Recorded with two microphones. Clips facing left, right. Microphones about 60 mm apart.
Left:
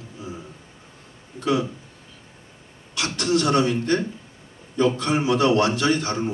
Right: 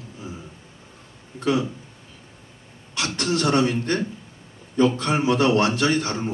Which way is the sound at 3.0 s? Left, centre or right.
Right.